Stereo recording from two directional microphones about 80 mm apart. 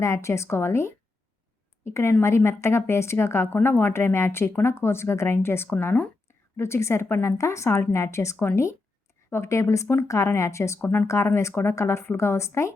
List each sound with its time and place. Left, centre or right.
0.0 s speech: left
10.8 s speech: left
11.0 s speech: left